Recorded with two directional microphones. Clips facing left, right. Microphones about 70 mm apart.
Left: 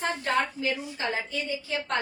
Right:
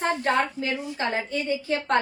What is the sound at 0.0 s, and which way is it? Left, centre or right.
A woman's voice, right.